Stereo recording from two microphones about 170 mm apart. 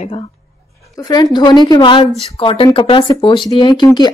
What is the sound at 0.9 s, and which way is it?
Speech, 20° left (ahead or behind).